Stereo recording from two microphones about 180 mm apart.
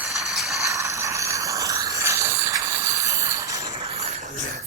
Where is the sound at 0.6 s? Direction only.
15° right (ahead or behind).